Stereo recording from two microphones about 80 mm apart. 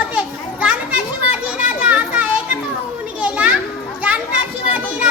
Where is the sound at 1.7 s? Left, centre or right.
Centre.